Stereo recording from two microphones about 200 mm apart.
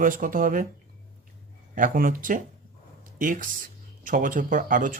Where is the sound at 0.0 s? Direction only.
40° right (ahead or behind).